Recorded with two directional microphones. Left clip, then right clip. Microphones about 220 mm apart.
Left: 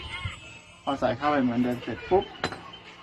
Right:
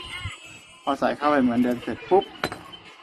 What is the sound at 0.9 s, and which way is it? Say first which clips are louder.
Speech: right 3 dB; 50° right (ahead or behind).